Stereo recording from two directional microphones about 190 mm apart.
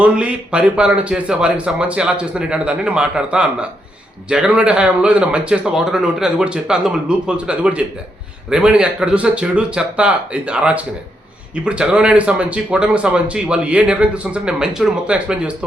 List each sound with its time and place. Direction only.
0.0 s speech: 5° right (ahead or behind)